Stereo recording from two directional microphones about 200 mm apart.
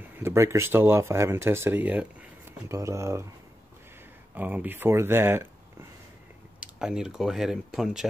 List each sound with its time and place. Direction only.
0.0 s speech: 15° right (ahead or behind)
4.4 s speech: 10° right (ahead or behind)
6.6 s speech: 5° right (ahead or behind)